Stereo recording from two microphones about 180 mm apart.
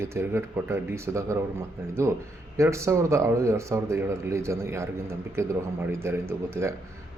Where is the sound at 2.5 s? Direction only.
15° right (ahead or behind).